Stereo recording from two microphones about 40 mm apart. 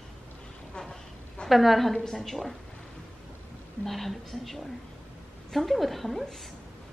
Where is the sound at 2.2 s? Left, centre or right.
Centre.